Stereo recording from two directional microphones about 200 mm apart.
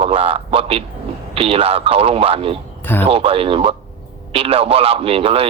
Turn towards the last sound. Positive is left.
turn(degrees=-30)  # may be behind; listen again after turning